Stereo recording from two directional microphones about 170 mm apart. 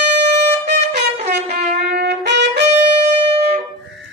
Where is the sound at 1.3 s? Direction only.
75° right (ahead or behind).